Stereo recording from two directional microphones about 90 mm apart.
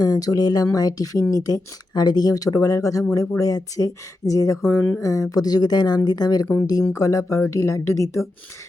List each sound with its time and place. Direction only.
0.0 s speech: 45° left (ahead or behind)